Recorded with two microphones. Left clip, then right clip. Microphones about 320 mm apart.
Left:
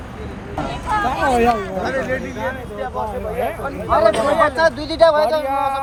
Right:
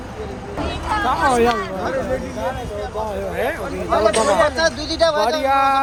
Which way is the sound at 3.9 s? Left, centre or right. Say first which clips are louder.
Left 1 dB; left.